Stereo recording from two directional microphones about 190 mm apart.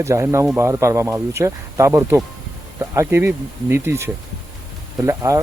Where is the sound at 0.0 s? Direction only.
15° right (ahead or behind).